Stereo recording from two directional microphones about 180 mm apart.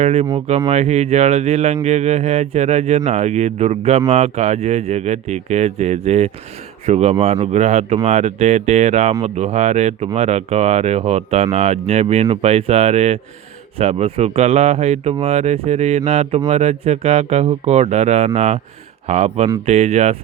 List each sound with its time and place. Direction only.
0.0 s speech: 35° right (ahead or behind)